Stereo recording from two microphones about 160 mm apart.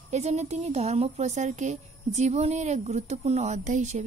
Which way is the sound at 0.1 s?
45° right (ahead or behind).